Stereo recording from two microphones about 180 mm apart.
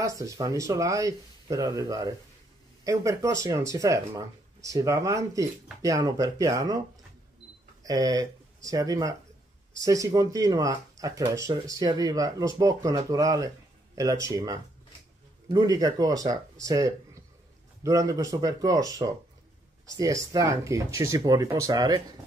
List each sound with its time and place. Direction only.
0.0 s speech: 20° right (ahead or behind)
7.8 s speech: 20° right (ahead or behind)